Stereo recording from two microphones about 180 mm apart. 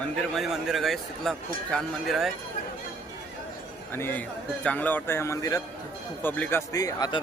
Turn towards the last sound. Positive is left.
turn(degrees=20)  # may be behind; listen again after turning